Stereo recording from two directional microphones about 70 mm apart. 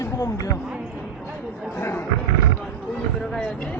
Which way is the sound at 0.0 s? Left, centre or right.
Left.